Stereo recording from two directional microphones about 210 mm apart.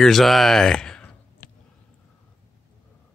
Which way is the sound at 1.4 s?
40° left (ahead or behind).